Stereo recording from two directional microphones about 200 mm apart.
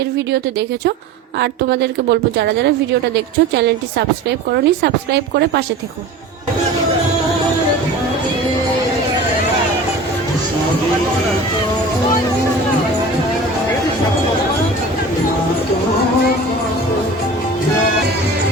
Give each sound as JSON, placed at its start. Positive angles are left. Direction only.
{"t": 1.4, "sound": "speech", "side_deg": -60}
{"t": 4.5, "sound": "speech", "side_deg": -55}